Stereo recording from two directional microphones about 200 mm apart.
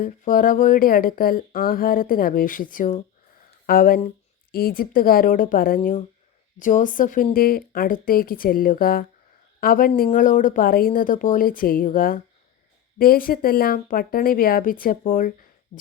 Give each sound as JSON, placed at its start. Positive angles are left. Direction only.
{"t": 0.0, "sound": "a woman's voice", "side_deg": 45}